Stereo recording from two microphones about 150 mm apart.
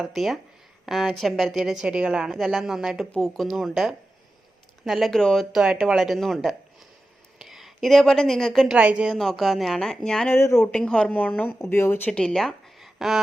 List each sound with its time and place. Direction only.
0.0 s a woman's voice: centre (ahead or behind)
10.3 s speech: 15° left (ahead or behind)
10.7 s speech: 5° left (ahead or behind)